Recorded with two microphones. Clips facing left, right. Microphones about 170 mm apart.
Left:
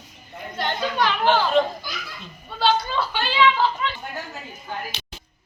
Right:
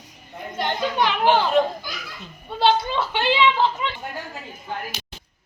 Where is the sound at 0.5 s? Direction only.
15° right (ahead or behind).